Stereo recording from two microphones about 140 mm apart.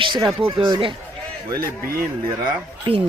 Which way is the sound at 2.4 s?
40° right (ahead or behind).